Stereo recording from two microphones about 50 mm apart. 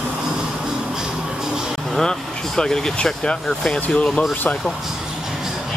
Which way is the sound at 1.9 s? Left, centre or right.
Centre.